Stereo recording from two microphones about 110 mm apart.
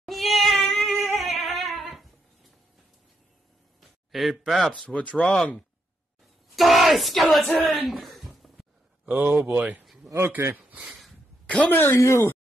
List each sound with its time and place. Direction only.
0.0 s cat: centre (ahead or behind)
4.1 s speech: centre (ahead or behind)
6.5 s a sound: centre (ahead or behind)
9.0 s a man's voice: 15° right (ahead or behind)
10.0 s speech: 20° right (ahead or behind)
11.4 s speech: 10° left (ahead or behind)